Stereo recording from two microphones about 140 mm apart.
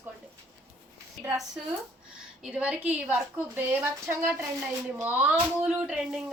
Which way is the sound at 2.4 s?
10° right (ahead or behind).